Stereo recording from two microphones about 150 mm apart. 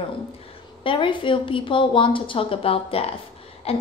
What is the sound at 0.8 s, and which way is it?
A woman's voice, 35° left (ahead or behind).